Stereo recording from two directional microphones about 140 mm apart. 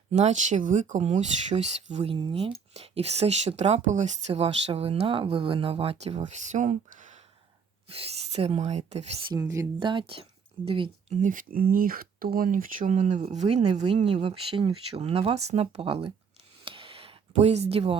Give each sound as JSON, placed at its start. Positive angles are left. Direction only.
{"t": 0.1, "sound": "speech", "side_deg": -55}
{"t": 7.9, "sound": "speech", "side_deg": -45}
{"t": 9.3, "sound": "speech", "side_deg": -25}
{"t": 9.8, "sound": "speech", "side_deg": -35}
{"t": 11.1, "sound": "speech", "side_deg": -65}
{"t": 13.8, "sound": "speech", "side_deg": -40}
{"t": 16.6, "sound": "a sound", "side_deg": -40}